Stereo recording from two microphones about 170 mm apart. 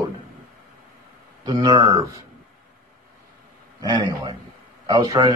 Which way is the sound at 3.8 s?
25° right (ahead or behind).